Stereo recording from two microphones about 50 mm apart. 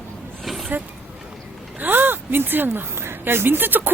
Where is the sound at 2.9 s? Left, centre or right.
Right.